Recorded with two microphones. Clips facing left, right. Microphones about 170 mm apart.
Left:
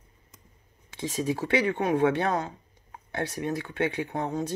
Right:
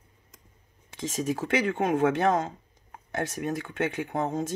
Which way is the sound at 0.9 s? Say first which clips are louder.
Left 1 dB; 45° right (ahead or behind).